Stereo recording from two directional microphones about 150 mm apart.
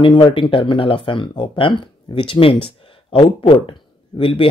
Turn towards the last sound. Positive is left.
turn(degrees=35)  # may be behind; listen again after turning